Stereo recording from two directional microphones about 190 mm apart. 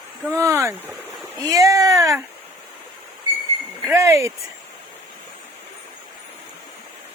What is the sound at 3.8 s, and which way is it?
Speech, 15° right (ahead or behind).